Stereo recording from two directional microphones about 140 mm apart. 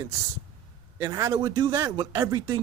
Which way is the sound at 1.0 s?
20° right (ahead or behind).